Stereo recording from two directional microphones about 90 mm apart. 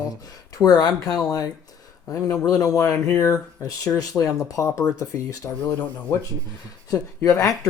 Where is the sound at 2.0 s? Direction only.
35° left (ahead or behind).